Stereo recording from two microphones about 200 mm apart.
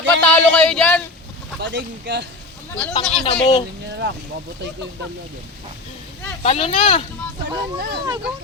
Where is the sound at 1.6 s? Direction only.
60° right (ahead or behind).